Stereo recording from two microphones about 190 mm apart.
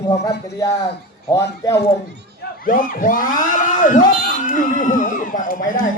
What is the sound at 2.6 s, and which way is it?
Speech, 45° left (ahead or behind).